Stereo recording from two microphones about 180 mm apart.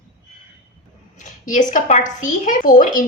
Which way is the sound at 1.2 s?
45° left (ahead or behind).